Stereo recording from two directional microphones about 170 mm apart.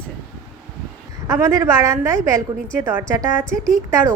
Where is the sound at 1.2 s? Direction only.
20° right (ahead or behind).